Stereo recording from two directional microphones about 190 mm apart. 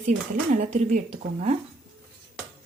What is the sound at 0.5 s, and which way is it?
A woman's voice, 40° right (ahead or behind).